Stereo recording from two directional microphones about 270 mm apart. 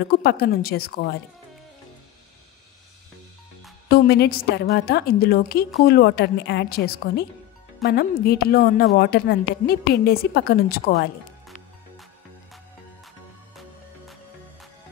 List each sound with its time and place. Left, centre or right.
0.0 s a woman's voice: left
3.9 s a woman's voice: left